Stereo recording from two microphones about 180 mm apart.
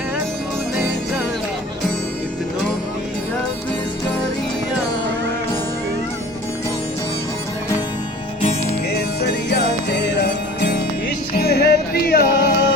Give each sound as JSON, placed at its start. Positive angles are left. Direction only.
{"t": 8.9, "sound": "music", "side_deg": 65}